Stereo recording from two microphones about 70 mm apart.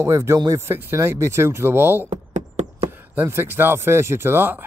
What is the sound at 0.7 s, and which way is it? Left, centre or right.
Music, right.